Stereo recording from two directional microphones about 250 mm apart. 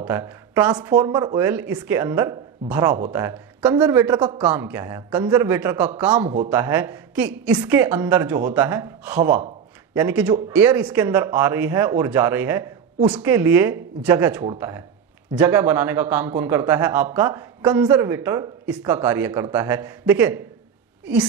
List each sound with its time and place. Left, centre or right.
0.0 s a man's voice: centre
6.2 s speech: right
6.5 s a man's voice: centre